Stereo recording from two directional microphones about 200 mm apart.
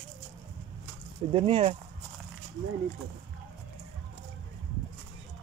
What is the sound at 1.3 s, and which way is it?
Speech, 30° right (ahead or behind).